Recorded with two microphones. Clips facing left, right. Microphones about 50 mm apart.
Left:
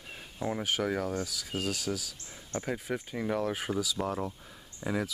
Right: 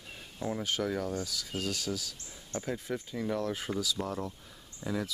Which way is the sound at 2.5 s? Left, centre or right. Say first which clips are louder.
Left 1 dB; left.